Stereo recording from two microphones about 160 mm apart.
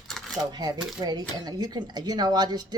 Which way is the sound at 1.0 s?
25° right (ahead or behind).